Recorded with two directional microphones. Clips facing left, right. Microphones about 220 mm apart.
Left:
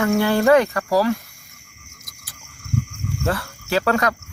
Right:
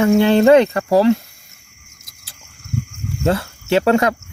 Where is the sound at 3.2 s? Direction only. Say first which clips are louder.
Right 6 dB; 25° right (ahead or behind).